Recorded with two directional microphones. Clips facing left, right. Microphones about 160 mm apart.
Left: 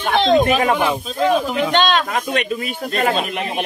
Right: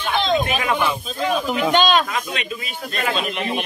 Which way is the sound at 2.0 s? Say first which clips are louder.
Left 6 dB; 50° left (ahead or behind).